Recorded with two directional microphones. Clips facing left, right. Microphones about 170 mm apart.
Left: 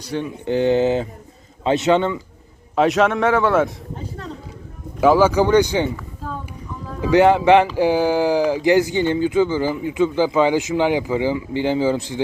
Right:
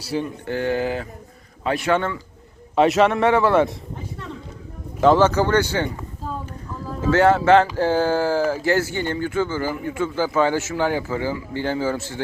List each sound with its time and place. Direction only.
0.0 s a man's voice: 5° right (ahead or behind)
0.4 s speech: 20° left (ahead or behind)
2.7 s a man's voice: centre (ahead or behind)
4.9 s speech: 10° left (ahead or behind)
7.0 s speech: 15° left (ahead or behind)